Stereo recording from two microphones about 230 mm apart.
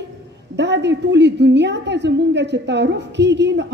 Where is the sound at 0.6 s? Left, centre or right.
Right.